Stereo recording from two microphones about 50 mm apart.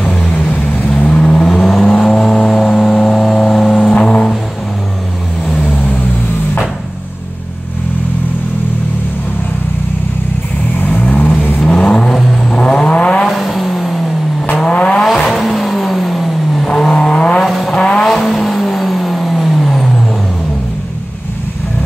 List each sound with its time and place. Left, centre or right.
0.0 s vehicle: centre
0.5 s vehicle: left
0.8 s vehicle: left; by 3.9 s centre
4.0 s music: centre
10.8 s vehicle: left
11.6 s vehicle: centre
12.5 s vehicle: centre
13.3 s vehicle: centre
14.6 s vehicle: left
15.0 s vehicle: centre
16.6 s vehicle: centre
17.5 s vehicle: centre